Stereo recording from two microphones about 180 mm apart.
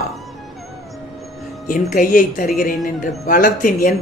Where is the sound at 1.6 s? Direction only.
50° left (ahead or behind).